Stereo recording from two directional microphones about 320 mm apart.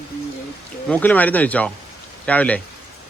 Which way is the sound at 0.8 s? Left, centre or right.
Centre.